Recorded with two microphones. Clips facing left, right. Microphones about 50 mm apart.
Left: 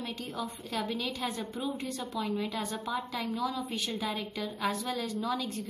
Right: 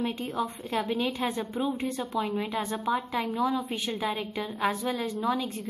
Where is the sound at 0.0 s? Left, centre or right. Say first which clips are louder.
Right 7 dB; right.